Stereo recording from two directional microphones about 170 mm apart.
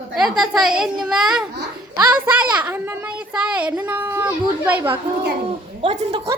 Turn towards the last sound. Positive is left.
turn(degrees=-35)  # may be behind; listen again after turning